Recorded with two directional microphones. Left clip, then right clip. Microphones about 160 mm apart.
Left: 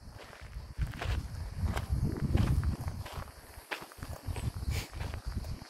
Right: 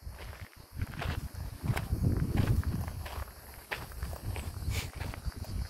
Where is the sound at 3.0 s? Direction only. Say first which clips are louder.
Right 1 dB; 5° right (ahead or behind).